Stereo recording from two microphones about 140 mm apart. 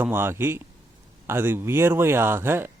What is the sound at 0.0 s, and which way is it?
Speech, 15° right (ahead or behind).